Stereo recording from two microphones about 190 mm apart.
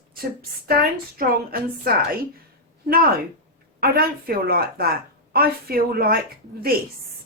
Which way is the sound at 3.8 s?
50° right (ahead or behind).